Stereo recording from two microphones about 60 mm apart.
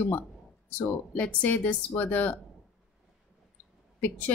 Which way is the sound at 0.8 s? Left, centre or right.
Left.